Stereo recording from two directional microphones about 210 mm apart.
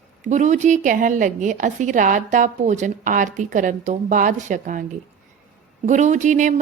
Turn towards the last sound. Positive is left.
turn(degrees=-35)  # may be behind; listen again after turning